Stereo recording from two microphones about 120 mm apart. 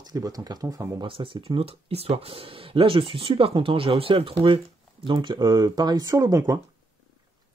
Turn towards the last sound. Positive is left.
turn(degrees=-30)  # may be behind; listen again after turning